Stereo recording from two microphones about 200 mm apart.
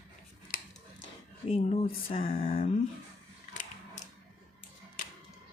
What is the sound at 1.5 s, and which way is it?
Speech, 30° left (ahead or behind).